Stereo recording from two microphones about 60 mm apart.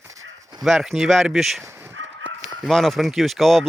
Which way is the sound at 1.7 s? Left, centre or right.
Right.